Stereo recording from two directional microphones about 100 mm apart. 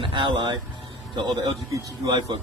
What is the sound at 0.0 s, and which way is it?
A man's voice, 55° right (ahead or behind).